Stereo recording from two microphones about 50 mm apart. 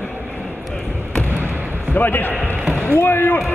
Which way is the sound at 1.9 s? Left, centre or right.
Left.